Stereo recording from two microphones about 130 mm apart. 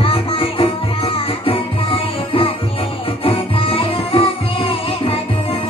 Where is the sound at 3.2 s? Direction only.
45° left (ahead or behind).